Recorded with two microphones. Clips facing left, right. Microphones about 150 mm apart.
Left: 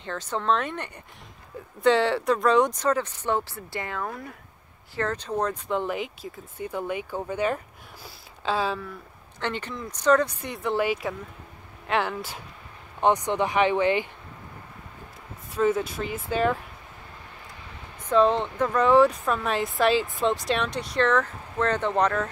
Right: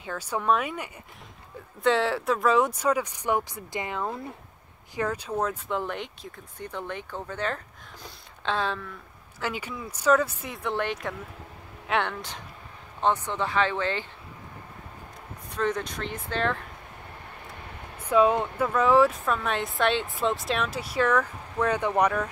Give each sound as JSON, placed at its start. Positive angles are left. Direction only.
{"t": 0.0, "sound": "speech", "side_deg": -10}
{"t": 4.9, "sound": "speech", "side_deg": -10}
{"t": 9.4, "sound": "speech", "side_deg": -10}
{"t": 13.0, "sound": "speech", "side_deg": 15}
{"t": 15.5, "sound": "speech", "side_deg": 5}
{"t": 17.9, "sound": "speech", "side_deg": -10}